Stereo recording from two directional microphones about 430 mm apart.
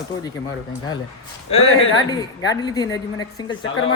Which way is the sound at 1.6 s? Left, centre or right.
Left.